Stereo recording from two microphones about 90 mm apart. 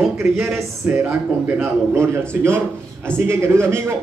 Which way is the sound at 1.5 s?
25° right (ahead or behind).